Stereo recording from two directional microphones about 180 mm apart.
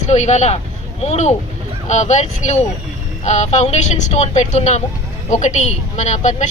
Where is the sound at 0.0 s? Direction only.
40° left (ahead or behind).